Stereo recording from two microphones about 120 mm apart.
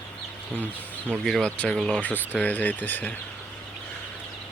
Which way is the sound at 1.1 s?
5° left (ahead or behind).